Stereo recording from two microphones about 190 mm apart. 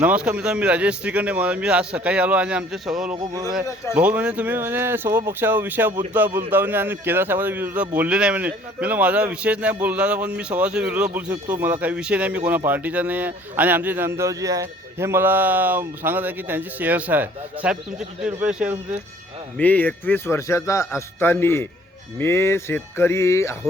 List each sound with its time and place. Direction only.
0.0 s a man's voice: 5° right (ahead or behind)
3.2 s a man's voice: 15° right (ahead or behind)
3.9 s a man's voice: 5° right (ahead or behind)
19.5 s speech: 10° left (ahead or behind)